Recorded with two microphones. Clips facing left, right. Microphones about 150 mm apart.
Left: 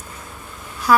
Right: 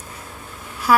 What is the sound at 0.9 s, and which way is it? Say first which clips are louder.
Speech: left 1 dB; 10° right (ahead or behind).